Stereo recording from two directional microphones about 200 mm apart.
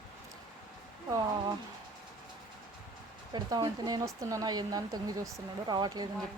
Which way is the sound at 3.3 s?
20° right (ahead or behind).